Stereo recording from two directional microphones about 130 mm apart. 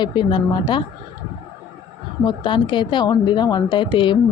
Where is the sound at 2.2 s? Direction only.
35° left (ahead or behind).